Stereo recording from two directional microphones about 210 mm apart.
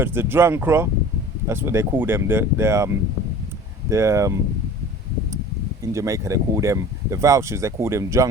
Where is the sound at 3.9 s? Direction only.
15° right (ahead or behind).